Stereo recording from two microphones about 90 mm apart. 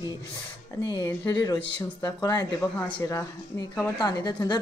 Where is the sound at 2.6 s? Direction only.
15° left (ahead or behind).